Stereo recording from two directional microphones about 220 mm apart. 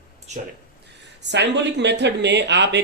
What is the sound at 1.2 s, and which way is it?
Speech, 50° right (ahead or behind).